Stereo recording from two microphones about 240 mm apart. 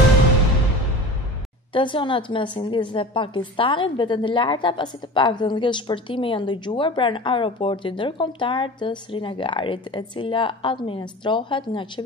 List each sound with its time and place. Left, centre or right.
1.7 s a woman's voice: left